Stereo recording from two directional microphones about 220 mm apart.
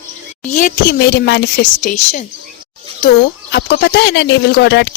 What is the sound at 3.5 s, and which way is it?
Speech, 50° left (ahead or behind).